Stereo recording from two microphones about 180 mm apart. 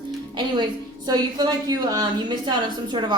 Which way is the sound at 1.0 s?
20° right (ahead or behind).